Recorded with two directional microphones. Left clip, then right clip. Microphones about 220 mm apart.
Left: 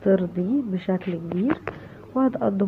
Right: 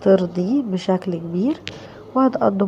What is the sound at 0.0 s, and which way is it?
A woman's voice, 15° right (ahead or behind).